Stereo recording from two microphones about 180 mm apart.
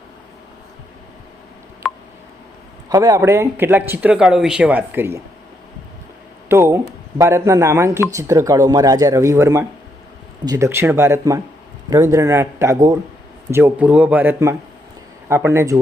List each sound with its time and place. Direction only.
1.8 s a sound: centre (ahead or behind)
2.9 s speech: 20° right (ahead or behind)
6.5 s speech: 15° right (ahead or behind)